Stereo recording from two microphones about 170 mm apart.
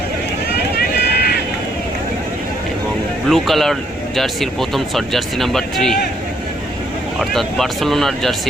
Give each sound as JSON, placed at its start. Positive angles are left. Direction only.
{"t": 0.8, "sound": "run", "side_deg": 65}
{"t": 3.2, "sound": "speech", "side_deg": 0}
{"t": 7.2, "sound": "speech", "side_deg": 0}